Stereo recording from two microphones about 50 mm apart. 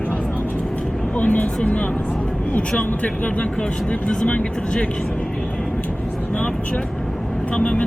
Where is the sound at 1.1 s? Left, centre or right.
Left.